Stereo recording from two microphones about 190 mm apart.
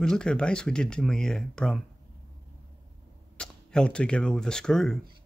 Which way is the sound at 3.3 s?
5° left (ahead or behind).